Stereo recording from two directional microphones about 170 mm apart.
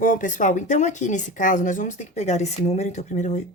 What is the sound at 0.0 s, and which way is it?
Speech, 50° left (ahead or behind).